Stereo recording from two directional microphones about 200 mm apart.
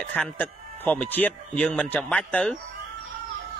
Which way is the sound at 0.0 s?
5° left (ahead or behind).